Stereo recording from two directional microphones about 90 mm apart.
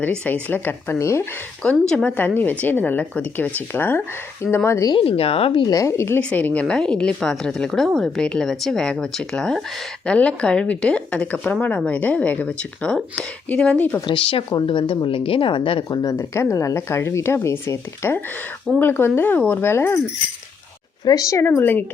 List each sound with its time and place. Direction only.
0.0 s speech: 15° left (ahead or behind); by 1.3 s 30° left (ahead or behind)
1.9 s a woman's voice: 10° left (ahead or behind)
2.1 s speech: 20° left (ahead or behind)
4.9 s speech: 90° left
5.6 s speech: 35° left (ahead or behind)
6.1 s a woman's voice: 15° left (ahead or behind)
14.1 s speech: 70° left (ahead or behind)
16.1 s speech: 30° left (ahead or behind)
21.0 s speech: 45° left (ahead or behind)
21.4 s speech: 25° left (ahead or behind)